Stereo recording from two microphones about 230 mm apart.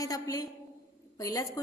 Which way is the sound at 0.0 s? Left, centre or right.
Centre.